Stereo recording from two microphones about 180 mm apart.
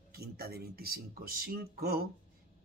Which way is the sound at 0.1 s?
60° right (ahead or behind).